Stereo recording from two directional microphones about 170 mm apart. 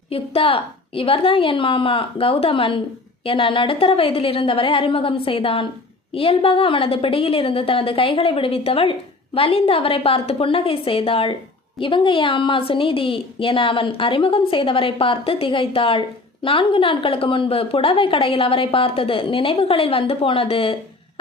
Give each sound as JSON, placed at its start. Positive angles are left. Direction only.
{"t": 0.1, "sound": "a woman's voice", "side_deg": 35}